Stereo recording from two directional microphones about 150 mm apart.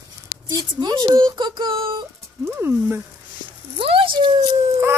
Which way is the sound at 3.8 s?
35° right (ahead or behind).